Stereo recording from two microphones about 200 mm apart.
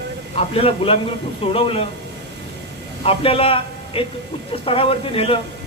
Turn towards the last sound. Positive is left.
turn(degrees=30)  # may be behind; listen again after turning